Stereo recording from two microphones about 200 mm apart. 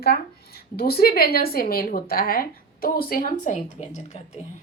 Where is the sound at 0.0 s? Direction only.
50° left (ahead or behind); by 4.4 s 35° left (ahead or behind).